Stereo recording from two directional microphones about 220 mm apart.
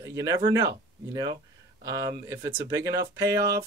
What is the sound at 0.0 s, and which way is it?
Speech, 15° right (ahead or behind).